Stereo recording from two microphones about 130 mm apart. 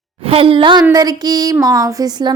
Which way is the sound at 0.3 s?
45° right (ahead or behind).